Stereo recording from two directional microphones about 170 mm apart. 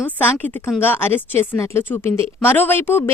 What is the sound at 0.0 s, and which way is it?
Speech, 15° left (ahead or behind).